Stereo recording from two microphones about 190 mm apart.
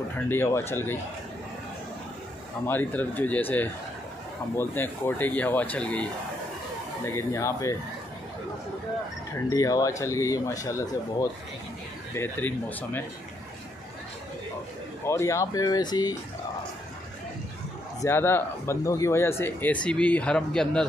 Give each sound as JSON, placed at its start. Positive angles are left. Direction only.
{"t": 0.3, "sound": "speech", "side_deg": 15}
{"t": 2.6, "sound": "speech", "side_deg": 10}
{"t": 7.1, "sound": "speech", "side_deg": 15}
{"t": 9.5, "sound": "speech", "side_deg": 20}
{"t": 15.0, "sound": "speech", "side_deg": 15}
{"t": 18.0, "sound": "speech", "side_deg": 10}